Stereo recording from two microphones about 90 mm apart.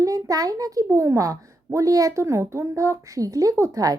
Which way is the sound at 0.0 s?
40° right (ahead or behind).